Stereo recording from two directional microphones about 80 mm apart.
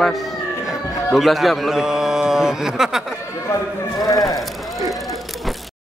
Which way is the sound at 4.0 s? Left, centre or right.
Left.